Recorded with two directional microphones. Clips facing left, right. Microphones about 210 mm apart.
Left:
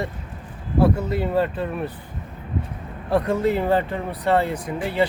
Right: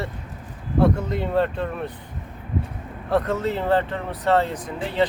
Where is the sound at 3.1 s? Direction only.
10° left (ahead or behind).